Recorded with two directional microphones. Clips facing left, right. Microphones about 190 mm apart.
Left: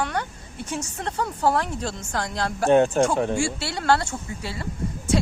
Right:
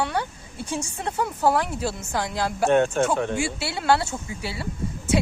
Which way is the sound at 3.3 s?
5° right (ahead or behind).